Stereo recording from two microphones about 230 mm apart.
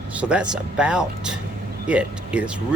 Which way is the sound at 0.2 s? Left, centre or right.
Centre.